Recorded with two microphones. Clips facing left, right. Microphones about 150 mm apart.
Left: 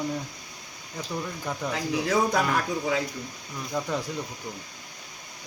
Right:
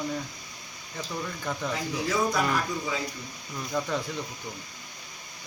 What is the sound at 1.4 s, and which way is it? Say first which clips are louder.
Speech: even; 10° left (ahead or behind).